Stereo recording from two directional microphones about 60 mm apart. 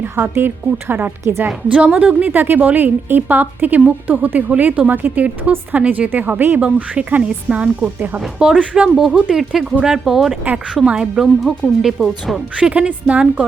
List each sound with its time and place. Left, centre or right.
0.3 s a woman's voice: right
1.2 s a woman's voice: right
1.7 s a woman's voice: right
7.9 s a woman's voice: right
8.4 s speech: centre
9.3 s speech: centre
12.5 s a woman's voice: centre